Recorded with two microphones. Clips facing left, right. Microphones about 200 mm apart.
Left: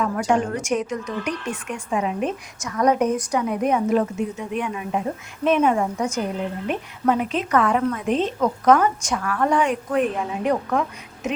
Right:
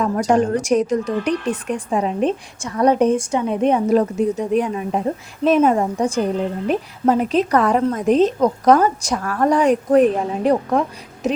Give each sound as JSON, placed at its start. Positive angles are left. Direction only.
{"t": 0.0, "sound": "a woman's voice", "side_deg": -40}